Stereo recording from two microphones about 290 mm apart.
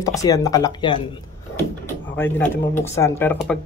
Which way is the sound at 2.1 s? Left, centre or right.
Centre.